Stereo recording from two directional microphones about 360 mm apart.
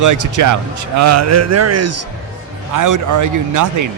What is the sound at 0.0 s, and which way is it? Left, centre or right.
Speech, right.